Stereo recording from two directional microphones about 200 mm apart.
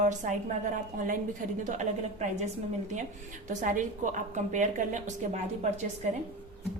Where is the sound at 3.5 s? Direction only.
40° right (ahead or behind).